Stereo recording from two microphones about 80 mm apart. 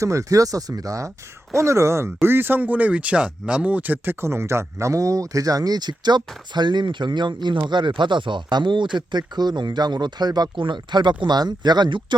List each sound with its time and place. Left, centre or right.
0.0 s speech: right
11.2 s speech: right